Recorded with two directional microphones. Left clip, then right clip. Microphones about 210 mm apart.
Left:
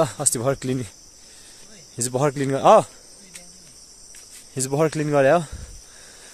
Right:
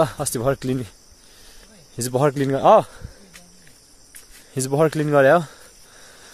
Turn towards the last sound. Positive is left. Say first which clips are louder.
# right 2 dB
turn(degrees=-10)  # may be behind; listen again after turning